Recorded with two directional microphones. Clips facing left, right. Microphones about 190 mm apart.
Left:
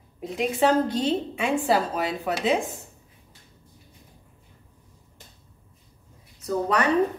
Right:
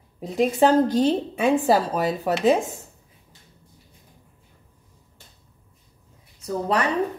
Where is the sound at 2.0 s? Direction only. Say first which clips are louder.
Right 6 dB; 40° right (ahead or behind).